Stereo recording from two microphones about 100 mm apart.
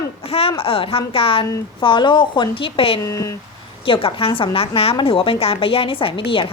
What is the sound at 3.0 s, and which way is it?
Speech, 30° left (ahead or behind).